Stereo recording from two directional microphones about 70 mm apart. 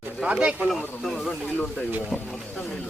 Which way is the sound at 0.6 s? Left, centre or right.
Centre.